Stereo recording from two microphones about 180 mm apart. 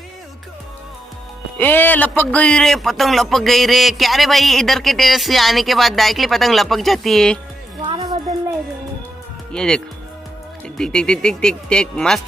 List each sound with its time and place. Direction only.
1.6 s a man's voice: 10° left (ahead or behind)
7.8 s music: 25° right (ahead or behind)
9.5 s a man's voice: 5° left (ahead or behind)